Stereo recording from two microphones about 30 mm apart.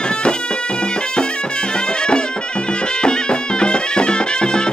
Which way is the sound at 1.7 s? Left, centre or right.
Left.